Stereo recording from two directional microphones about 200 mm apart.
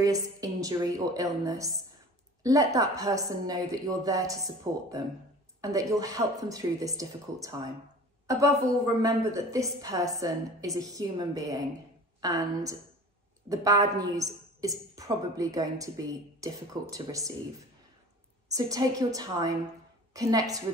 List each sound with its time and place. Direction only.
0.0 s a woman's voice: 15° right (ahead or behind)
20.1 s a woman's voice: 15° right (ahead or behind)